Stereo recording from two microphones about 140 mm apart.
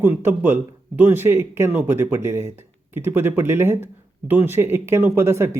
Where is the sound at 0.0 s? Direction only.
15° right (ahead or behind).